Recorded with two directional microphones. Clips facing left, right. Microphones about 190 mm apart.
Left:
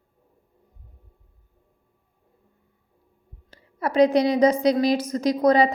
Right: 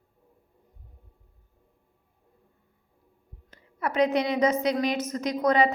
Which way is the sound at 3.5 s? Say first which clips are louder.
Left 4 dB; 35° left (ahead or behind).